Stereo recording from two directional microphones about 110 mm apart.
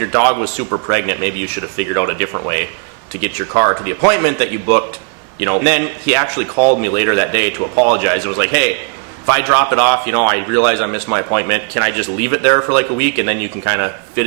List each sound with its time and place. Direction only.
0.0 s a man's voice: 15° right (ahead or behind)